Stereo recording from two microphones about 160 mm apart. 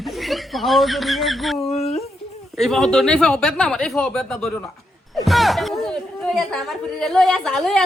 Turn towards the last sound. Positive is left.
turn(degrees=0)  # may be behind; listen again after turning